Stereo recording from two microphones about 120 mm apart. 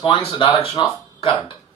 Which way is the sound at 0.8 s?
40° left (ahead or behind).